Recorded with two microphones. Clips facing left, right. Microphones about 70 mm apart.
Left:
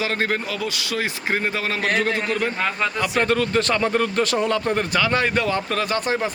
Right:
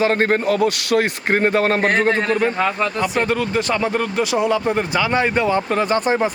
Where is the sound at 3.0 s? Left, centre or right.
Centre.